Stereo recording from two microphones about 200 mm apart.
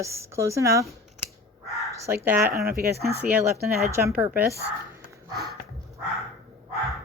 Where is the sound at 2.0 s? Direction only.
10° right (ahead or behind).